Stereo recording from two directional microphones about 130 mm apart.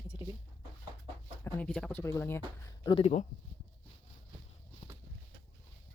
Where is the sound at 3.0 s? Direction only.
70° left (ahead or behind).